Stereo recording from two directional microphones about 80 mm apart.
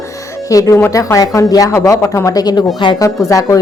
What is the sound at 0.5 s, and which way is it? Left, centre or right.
A woman's voice, left.